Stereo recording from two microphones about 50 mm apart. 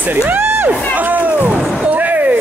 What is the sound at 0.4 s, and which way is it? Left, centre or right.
Crowd, right.